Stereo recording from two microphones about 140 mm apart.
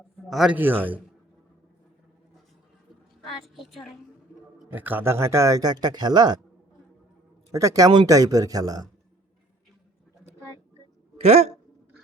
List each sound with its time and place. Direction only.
0.3 s a man's voice: centre (ahead or behind)
0.5 s a man's voice: 15° right (ahead or behind)
3.4 s a woman's voice: centre (ahead or behind)
4.7 s speech: 15° right (ahead or behind); by 6.4 s 30° right (ahead or behind)
7.5 s speech: 25° right (ahead or behind)
11.2 s speech: 45° right (ahead or behind)